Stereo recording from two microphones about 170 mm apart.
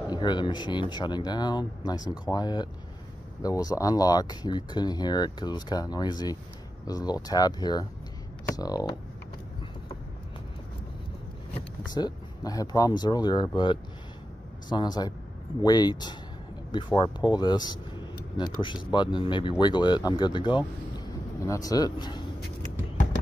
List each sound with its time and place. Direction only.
0.1 s speech: 25° left (ahead or behind)
11.9 s speech: 25° left (ahead or behind)